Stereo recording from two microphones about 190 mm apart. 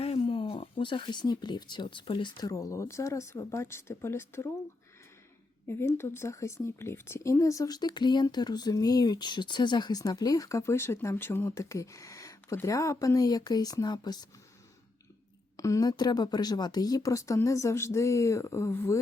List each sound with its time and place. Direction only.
0.0 s speech: 30° left (ahead or behind); by 4.4 s 15° left (ahead or behind)
5.6 s speech: 15° left (ahead or behind)
15.5 s speech: 15° left (ahead or behind)